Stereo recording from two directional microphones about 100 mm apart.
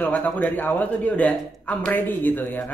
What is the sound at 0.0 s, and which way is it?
Speech, 15° left (ahead or behind).